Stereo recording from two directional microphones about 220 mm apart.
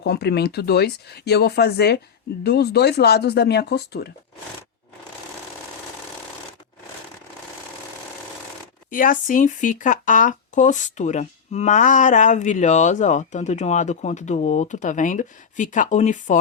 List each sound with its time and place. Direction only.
0.0 s speech: 50° left (ahead or behind)
8.9 s speech: 40° left (ahead or behind)